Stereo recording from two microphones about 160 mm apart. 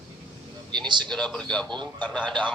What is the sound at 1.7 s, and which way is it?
Speech, 30° right (ahead or behind).